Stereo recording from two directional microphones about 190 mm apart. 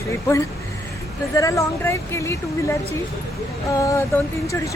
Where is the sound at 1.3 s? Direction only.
15° left (ahead or behind).